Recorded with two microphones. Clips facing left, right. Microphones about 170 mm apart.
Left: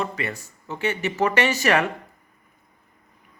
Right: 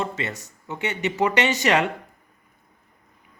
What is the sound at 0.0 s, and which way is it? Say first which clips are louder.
Speech: even; 20° right (ahead or behind).